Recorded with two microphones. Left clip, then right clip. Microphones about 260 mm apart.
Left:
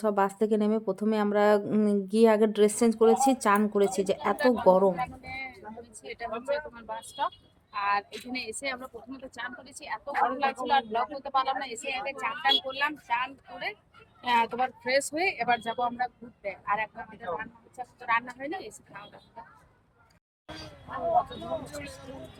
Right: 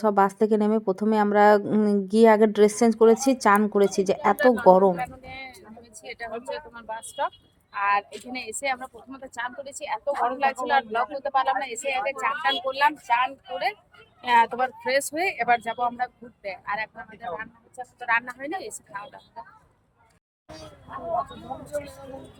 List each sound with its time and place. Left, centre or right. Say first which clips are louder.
0.0 s speech: right 5 dB; centre
5.8 s a sound: right 3 dB; centre
6.5 s speech: left 1 dB; centre
14.2 s speech: right 5 dB; centre